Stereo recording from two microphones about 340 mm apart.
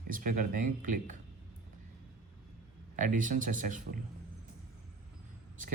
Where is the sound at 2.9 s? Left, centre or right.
Right.